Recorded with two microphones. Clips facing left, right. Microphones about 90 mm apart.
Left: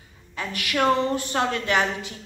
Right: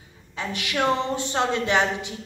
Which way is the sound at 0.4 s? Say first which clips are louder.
Left 1 dB; 20° right (ahead or behind).